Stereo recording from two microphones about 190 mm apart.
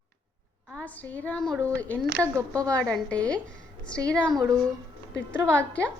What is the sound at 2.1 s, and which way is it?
Speech, 15° right (ahead or behind).